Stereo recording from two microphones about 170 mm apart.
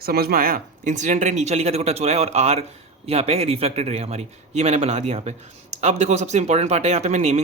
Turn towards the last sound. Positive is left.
turn(degrees=-40)  # may be behind; listen again after turning